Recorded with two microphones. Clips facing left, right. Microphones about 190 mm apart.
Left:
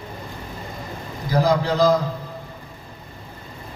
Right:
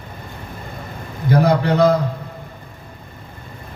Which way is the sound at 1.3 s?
65° right (ahead or behind).